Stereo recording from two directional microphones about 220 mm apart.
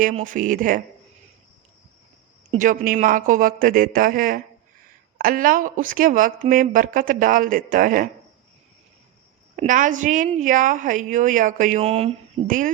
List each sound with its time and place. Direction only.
0.0 s a woman's voice: 35° right (ahead or behind)
2.5 s a woman's voice: 35° right (ahead or behind)
9.6 s a woman's voice: 35° right (ahead or behind)